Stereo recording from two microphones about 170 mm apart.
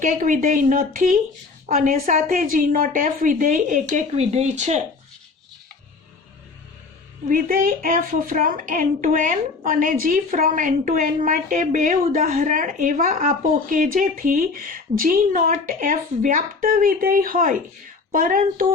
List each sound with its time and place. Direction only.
0.0 s a woman's voice: 50° right (ahead or behind)
7.3 s a woman's voice: 55° right (ahead or behind)